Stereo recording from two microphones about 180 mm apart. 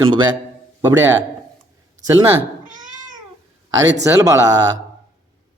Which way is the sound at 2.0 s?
15° right (ahead or behind).